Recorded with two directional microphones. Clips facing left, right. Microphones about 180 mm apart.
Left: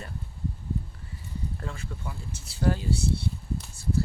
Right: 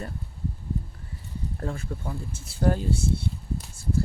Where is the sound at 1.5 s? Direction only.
50° right (ahead or behind).